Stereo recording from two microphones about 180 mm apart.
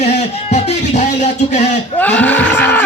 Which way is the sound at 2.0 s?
10° left (ahead or behind).